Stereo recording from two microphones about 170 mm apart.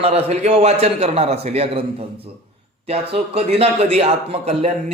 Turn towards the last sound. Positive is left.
turn(degrees=-35)  # may be behind; listen again after turning